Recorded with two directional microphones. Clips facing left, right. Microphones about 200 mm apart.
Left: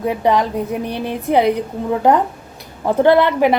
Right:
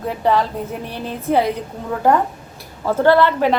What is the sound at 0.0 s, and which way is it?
A woman's voice, 15° left (ahead or behind).